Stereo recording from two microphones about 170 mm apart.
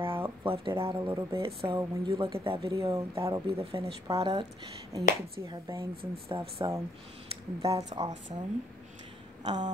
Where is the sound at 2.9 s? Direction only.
15° right (ahead or behind).